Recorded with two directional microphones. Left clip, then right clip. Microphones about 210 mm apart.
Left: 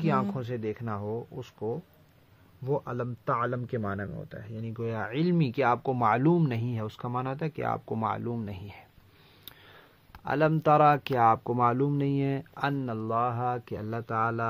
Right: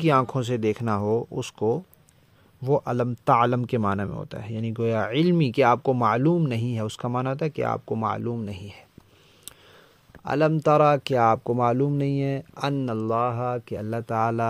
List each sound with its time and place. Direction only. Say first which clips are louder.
0.0 s speech: right 8 dB; 40° right (ahead or behind); by 8.8 s 20° right (ahead or behind)
9.4 s a sound: right 3 dB; 15° right (ahead or behind)
10.2 s speech: right 3 dB; 25° right (ahead or behind)
12.6 s speech: right 5 dB; 30° right (ahead or behind)